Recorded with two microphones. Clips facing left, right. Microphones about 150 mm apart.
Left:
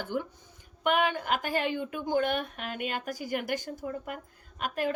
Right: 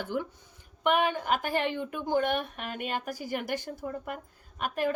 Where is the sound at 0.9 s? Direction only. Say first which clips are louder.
Right 1 dB; 45° right (ahead or behind).